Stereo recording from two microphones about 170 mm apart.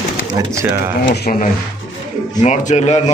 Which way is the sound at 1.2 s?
50° left (ahead or behind).